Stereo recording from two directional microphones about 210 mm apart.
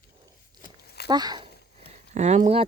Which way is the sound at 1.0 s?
20° right (ahead or behind).